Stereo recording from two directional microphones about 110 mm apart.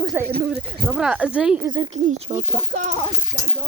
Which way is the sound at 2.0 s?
75° right (ahead or behind).